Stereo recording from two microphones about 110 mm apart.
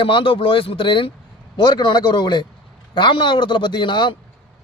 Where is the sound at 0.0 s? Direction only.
50° left (ahead or behind).